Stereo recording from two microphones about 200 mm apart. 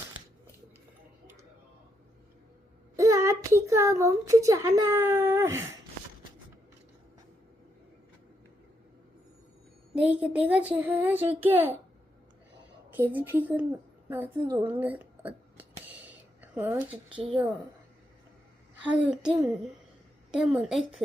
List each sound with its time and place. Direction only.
2.9 s a woman's voice: 15° right (ahead or behind)
9.9 s a woman's voice: 5° right (ahead or behind)
12.9 s a woman's voice: 10° right (ahead or behind)
18.9 s a woman's voice: 5° right (ahead or behind)